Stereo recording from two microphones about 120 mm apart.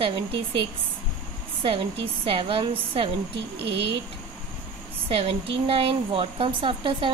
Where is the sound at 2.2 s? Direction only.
50° right (ahead or behind).